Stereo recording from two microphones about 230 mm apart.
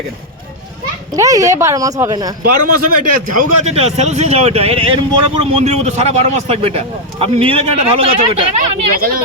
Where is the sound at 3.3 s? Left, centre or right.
Right.